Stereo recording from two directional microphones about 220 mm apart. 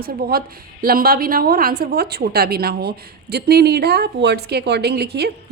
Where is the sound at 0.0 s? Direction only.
45° right (ahead or behind).